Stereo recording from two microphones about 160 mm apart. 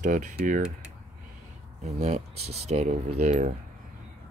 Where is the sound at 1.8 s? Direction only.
45° right (ahead or behind).